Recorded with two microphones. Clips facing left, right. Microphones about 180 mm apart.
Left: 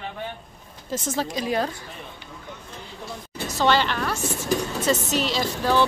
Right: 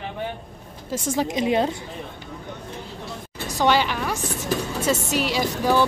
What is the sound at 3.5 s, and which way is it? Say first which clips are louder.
Speech: right 1 dB; 10° right (ahead or behind).